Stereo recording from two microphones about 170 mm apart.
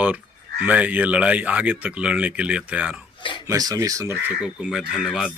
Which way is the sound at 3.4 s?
20° right (ahead or behind).